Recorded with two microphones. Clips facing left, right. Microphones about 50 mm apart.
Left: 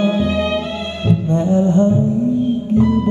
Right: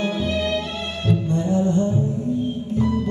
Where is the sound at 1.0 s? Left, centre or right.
Left.